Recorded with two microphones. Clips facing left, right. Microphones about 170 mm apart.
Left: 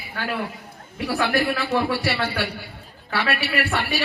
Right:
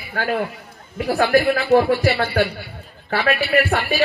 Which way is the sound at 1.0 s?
55° right (ahead or behind).